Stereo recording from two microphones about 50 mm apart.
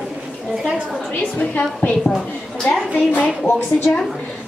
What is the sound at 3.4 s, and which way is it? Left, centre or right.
Speech, left.